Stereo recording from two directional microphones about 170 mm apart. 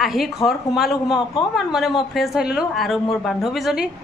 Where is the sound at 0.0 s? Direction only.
Centre (ahead or behind).